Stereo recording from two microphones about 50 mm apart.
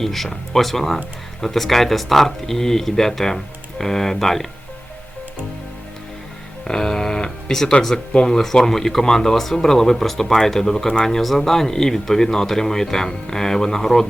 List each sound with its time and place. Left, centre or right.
0.0 s speech: centre
6.7 s a sound: centre
7.7 s speech: centre